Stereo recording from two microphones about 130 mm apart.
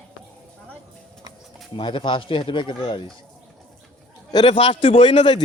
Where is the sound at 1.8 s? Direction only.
40° left (ahead or behind).